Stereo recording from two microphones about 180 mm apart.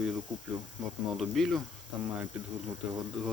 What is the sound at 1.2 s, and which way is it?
Speech, centre (ahead or behind).